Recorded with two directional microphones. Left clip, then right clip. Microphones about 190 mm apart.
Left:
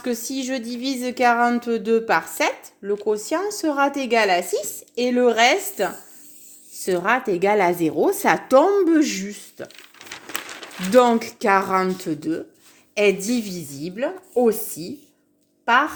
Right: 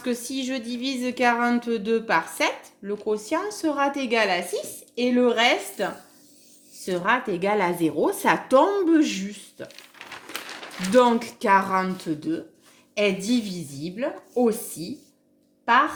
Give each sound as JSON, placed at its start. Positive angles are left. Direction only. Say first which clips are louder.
{"t": 0.0, "sound": "speech", "louder": "left 2 dB", "side_deg": 50}
{"t": 10.9, "sound": "a woman's voice", "louder": "left 3 dB", "side_deg": 50}